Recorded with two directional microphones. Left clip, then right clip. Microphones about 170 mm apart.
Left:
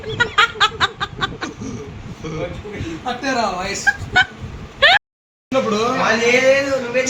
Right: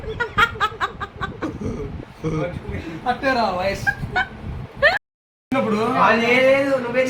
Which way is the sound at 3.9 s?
Centre (ahead or behind).